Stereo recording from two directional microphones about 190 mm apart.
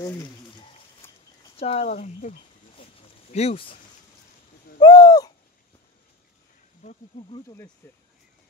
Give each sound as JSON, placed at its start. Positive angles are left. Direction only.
{"t": 0.0, "sound": "speech", "side_deg": 15}
{"t": 1.0, "sound": "a sound", "side_deg": 10}
{"t": 1.6, "sound": "a sound", "side_deg": 30}
{"t": 4.7, "sound": "bird", "side_deg": 20}
{"t": 6.8, "sound": "speech", "side_deg": 40}
{"t": 7.3, "sound": "speech", "side_deg": 20}